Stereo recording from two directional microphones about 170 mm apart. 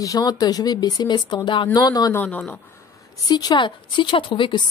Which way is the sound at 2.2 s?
10° left (ahead or behind).